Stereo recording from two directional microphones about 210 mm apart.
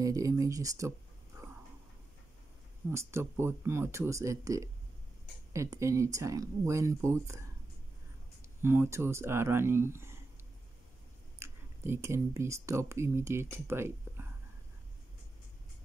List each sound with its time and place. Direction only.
0.0 s speech: 15° right (ahead or behind)
2.9 s speech: 10° right (ahead or behind)
8.6 s speech: 10° right (ahead or behind)
11.3 s speech: 10° right (ahead or behind)